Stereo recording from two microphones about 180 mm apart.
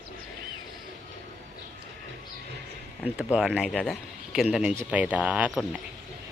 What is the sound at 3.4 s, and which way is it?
A man's voice, 5° right (ahead or behind).